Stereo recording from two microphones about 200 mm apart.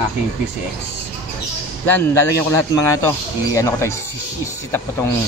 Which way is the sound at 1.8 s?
10° left (ahead or behind).